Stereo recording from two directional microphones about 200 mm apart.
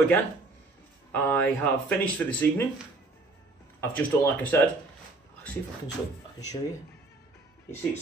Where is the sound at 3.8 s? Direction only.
10° left (ahead or behind).